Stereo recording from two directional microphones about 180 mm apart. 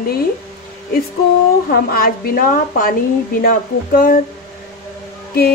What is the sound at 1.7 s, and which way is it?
Speech, 55° left (ahead or behind).